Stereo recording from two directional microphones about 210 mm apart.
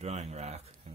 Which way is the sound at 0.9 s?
30° right (ahead or behind).